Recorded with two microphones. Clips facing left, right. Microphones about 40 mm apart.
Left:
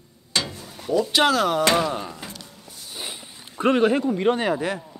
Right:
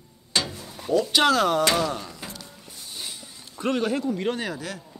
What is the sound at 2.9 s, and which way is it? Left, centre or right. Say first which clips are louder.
Speech: left 3 dB; left.